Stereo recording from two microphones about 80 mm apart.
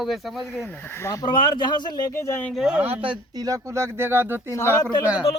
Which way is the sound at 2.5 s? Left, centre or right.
Centre.